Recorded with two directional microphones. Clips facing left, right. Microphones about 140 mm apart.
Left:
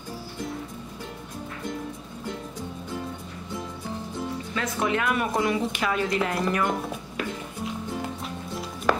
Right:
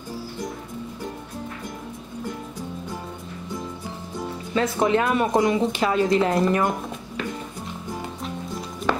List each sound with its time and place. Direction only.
4.6 s a woman's voice: 30° right (ahead or behind)